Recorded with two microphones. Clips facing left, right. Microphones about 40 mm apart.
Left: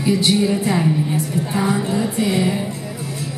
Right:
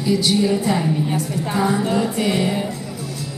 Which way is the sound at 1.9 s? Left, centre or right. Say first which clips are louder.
Even; right.